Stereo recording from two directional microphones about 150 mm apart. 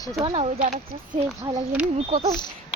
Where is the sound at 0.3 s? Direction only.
50° right (ahead or behind).